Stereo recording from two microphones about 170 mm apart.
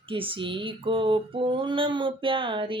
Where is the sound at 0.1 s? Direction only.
30° right (ahead or behind).